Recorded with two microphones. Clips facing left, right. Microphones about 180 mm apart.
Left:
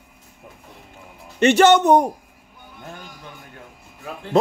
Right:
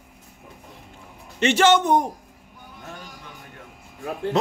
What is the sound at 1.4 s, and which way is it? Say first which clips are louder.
Speech: left 4 dB; 60° left (ahead or behind).